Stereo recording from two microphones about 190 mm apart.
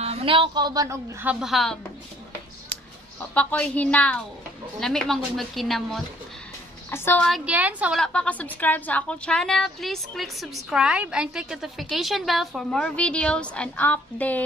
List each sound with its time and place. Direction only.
0.0 s a woman's voice: 30° right (ahead or behind); by 1.8 s centre (ahead or behind)
3.2 s a woman's voice: 5° left (ahead or behind)
6.9 s a woman's voice: 10° left (ahead or behind)
7.2 s a woman's voice: 5° right (ahead or behind)
8.0 s a woman's voice: 5° left (ahead or behind)